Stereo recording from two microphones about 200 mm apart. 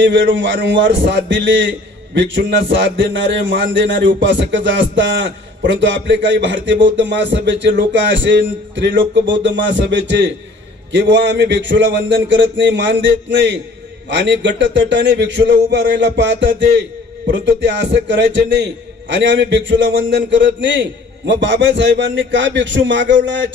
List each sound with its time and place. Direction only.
0.0 s a man's voice: 65° right (ahead or behind)